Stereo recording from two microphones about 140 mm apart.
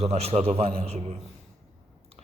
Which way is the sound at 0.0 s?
45° right (ahead or behind).